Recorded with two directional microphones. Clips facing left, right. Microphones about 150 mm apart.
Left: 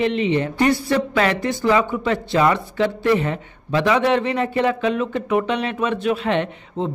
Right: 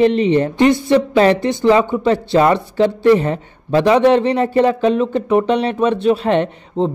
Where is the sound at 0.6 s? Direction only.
25° right (ahead or behind).